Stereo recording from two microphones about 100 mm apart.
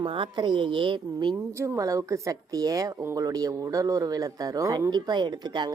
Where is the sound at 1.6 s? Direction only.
30° right (ahead or behind).